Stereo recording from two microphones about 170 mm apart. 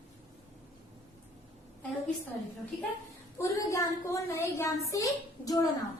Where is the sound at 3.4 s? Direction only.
15° left (ahead or behind).